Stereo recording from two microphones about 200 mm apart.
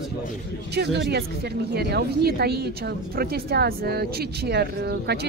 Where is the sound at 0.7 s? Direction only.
55° right (ahead or behind).